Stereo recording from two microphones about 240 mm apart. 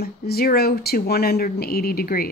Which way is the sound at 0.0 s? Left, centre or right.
Left.